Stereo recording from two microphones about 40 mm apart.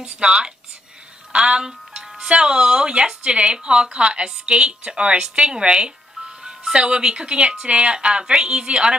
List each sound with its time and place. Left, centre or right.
0.0 s speech: right